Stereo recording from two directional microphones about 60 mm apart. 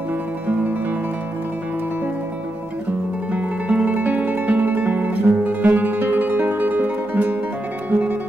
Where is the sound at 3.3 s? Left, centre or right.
Right.